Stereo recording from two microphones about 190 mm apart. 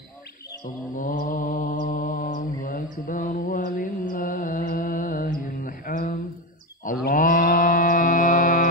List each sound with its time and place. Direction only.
0.9 s mantra: 45° left (ahead or behind)